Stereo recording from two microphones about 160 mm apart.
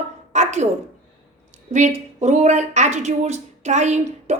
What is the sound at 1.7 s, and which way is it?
A woman's voice, 45° right (ahead or behind).